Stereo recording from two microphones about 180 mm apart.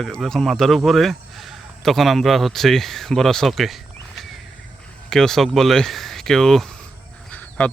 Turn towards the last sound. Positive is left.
turn(degrees=5)  # may be behind; listen again after turning